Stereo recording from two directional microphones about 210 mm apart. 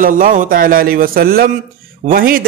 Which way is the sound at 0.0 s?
40° right (ahead or behind).